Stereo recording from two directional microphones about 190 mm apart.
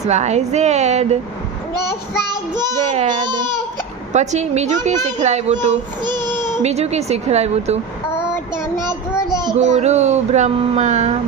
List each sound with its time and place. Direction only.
0.0 s speech: 35° right (ahead or behind)
2.5 s speech: 20° right (ahead or behind)
4.1 s speech: 40° right (ahead or behind)
6.0 s child singing: 20° right (ahead or behind)
6.6 s speech: 35° right (ahead or behind)
8.1 s child singing: 5° right (ahead or behind)
9.3 s child singing: 20° right (ahead or behind)
9.6 s speech: 40° right (ahead or behind)